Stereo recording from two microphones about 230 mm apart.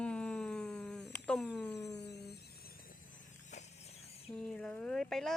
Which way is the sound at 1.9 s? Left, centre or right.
Left.